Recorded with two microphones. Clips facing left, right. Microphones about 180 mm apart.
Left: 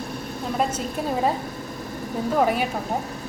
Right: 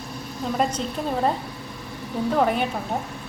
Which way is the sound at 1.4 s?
45° left (ahead or behind).